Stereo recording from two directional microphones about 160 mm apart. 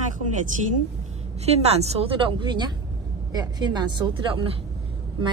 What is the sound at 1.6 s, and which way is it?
Speech, 40° right (ahead or behind).